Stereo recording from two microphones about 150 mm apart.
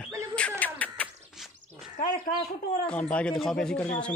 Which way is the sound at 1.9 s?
70° left (ahead or behind).